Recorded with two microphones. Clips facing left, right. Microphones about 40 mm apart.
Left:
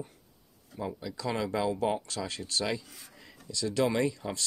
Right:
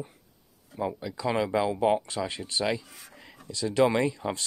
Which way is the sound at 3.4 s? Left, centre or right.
Right.